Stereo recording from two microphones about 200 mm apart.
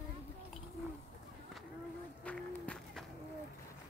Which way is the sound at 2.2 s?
5° left (ahead or behind).